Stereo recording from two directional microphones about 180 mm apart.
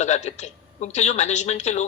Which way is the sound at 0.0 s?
40° left (ahead or behind).